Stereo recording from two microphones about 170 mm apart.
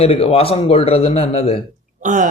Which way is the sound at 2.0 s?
50° right (ahead or behind).